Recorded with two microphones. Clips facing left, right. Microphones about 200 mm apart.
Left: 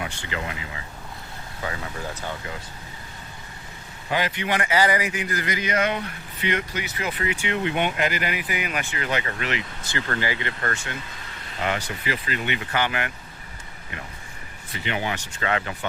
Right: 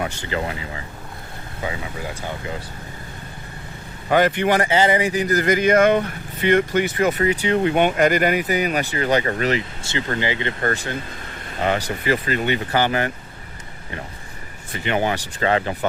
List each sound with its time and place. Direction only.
0.0 s speech: 40° right (ahead or behind)
4.1 s speech: 50° right (ahead or behind)
4.7 s speech: 25° right (ahead or behind)
9.8 s speech: 20° right (ahead or behind)
14.7 s speech: 45° right (ahead or behind)